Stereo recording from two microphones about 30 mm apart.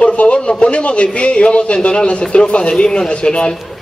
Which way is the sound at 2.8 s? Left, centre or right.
Left.